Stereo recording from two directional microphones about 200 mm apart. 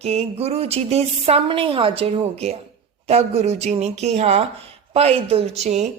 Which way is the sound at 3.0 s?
30° right (ahead or behind).